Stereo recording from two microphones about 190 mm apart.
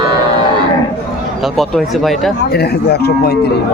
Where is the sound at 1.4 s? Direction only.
Centre (ahead or behind).